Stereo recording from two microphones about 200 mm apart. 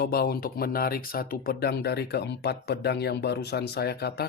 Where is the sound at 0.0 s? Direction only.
50° left (ahead or behind).